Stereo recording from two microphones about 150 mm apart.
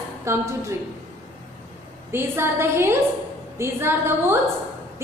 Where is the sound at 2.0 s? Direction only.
15° right (ahead or behind).